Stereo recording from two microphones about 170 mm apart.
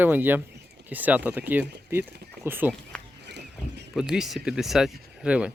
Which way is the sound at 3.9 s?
5° right (ahead or behind).